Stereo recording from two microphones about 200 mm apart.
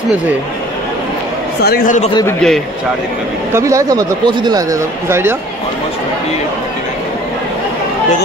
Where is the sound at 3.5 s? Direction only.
15° right (ahead or behind).